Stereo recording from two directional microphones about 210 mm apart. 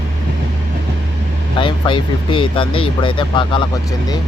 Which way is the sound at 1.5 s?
25° left (ahead or behind).